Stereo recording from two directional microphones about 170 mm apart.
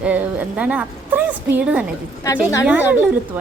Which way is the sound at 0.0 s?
10° right (ahead or behind).